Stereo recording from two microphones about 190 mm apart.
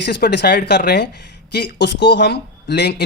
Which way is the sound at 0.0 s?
65° left (ahead or behind).